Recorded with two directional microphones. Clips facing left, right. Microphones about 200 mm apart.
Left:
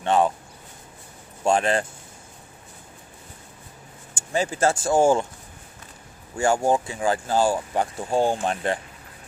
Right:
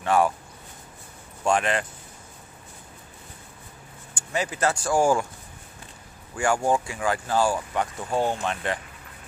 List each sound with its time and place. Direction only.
0.0 s speech: 25° left (ahead or behind)
1.4 s speech: 35° left (ahead or behind)
4.2 s speech: 30° left (ahead or behind)
6.3 s speech: 25° left (ahead or behind)